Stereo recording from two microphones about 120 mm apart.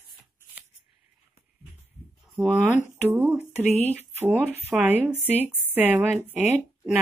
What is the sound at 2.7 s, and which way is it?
Speech, 85° left.